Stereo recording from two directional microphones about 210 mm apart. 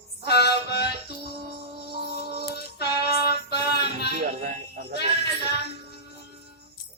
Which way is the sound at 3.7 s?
50° left (ahead or behind).